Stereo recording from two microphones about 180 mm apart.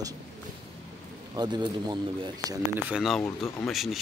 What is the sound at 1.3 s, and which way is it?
Speech, 25° right (ahead or behind).